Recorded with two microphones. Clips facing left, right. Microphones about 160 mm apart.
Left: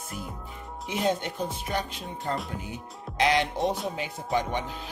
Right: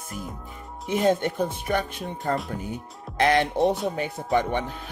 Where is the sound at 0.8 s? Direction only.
50° right (ahead or behind).